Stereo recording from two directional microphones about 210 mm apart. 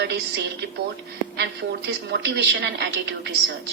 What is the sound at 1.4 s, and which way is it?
A woman's voice, 50° right (ahead or behind).